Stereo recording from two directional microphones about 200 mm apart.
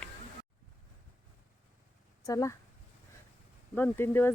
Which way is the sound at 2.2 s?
15° left (ahead or behind).